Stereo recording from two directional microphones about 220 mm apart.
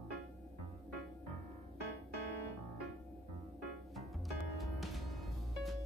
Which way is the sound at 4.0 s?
Centre (ahead or behind).